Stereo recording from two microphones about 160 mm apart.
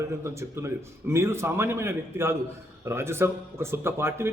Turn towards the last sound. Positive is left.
turn(degrees=-15)  # may be behind; listen again after turning